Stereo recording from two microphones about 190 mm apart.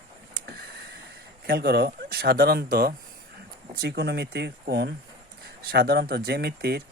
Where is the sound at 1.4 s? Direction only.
55° right (ahead or behind).